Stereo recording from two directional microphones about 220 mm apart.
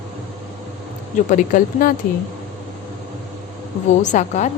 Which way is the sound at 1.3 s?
35° left (ahead or behind).